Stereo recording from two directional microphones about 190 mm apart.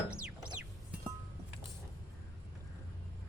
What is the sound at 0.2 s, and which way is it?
Music, 5° right (ahead or behind).